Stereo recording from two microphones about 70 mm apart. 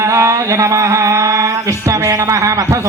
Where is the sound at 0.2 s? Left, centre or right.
Right.